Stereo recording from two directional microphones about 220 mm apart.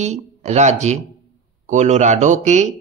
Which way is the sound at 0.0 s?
30° right (ahead or behind).